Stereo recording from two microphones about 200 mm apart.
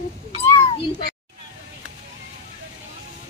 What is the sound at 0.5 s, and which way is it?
Meow, 20° left (ahead or behind).